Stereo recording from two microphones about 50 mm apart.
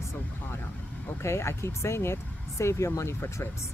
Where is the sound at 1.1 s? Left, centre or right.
Left.